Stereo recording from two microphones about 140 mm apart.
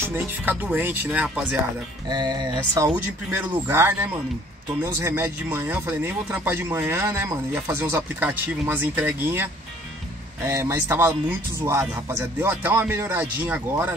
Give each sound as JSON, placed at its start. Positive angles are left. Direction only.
{"t": 0.0, "sound": "a man's voice", "side_deg": -15}
{"t": 2.0, "sound": "speech", "side_deg": -30}
{"t": 3.3, "sound": "a man's voice", "side_deg": -15}